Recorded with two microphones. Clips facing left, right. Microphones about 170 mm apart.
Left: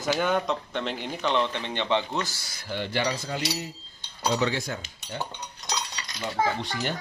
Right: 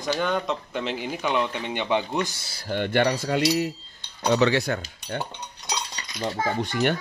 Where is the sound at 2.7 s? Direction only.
55° right (ahead or behind).